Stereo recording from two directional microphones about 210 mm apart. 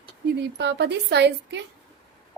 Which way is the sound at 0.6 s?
55° right (ahead or behind).